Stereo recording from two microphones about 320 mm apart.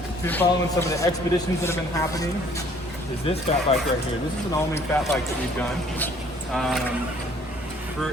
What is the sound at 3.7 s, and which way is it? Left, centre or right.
Speech, centre.